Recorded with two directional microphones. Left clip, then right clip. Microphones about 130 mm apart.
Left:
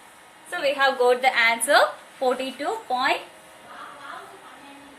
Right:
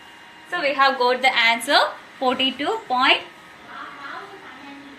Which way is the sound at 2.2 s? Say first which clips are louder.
Right 1 dB; centre (ahead or behind).